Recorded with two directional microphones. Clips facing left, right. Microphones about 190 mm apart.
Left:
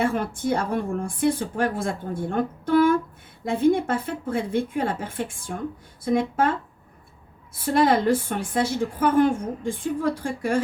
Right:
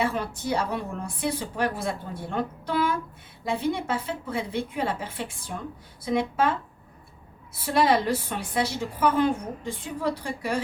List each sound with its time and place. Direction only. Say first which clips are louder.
0.0 s a woman's voice: left 4 dB; 50° left (ahead or behind)
7.6 s a woman's voice: left 3 dB; 50° left (ahead or behind)